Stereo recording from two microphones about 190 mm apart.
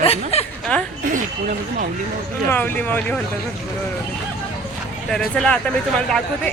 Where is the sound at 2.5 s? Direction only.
10° left (ahead or behind).